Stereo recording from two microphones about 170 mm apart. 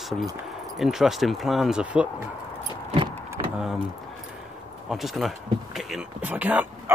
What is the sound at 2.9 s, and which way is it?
Vehicle, 30° right (ahead or behind).